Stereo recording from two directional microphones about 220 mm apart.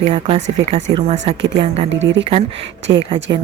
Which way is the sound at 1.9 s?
55° right (ahead or behind).